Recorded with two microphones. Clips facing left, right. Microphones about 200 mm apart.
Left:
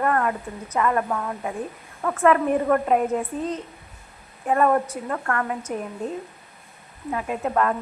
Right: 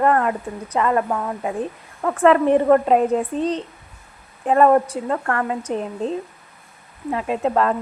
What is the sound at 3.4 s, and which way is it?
Speech, 85° right.